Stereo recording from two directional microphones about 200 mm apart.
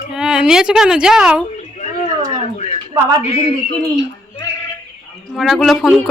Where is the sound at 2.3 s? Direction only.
35° left (ahead or behind).